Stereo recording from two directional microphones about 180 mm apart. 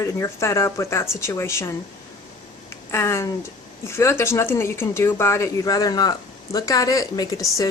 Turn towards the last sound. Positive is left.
turn(degrees=20)  # may be behind; listen again after turning